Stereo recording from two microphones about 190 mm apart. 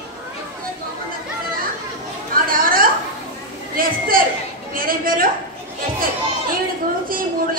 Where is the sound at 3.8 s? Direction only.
50° right (ahead or behind).